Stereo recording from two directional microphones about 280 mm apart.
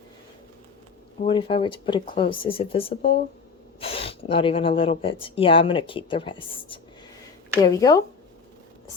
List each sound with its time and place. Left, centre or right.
1.2 s speech: centre